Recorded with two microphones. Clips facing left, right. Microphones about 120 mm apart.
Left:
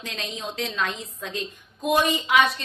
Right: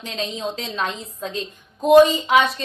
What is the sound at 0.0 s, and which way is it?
A woman's voice, 25° right (ahead or behind).